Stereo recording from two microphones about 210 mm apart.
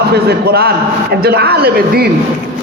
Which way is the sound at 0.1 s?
50° right (ahead or behind).